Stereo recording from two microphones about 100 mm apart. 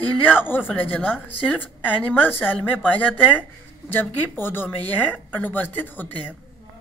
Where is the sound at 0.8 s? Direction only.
20° left (ahead or behind).